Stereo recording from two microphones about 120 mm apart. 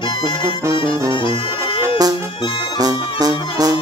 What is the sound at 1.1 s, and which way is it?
Brass instrument, 45° left (ahead or behind).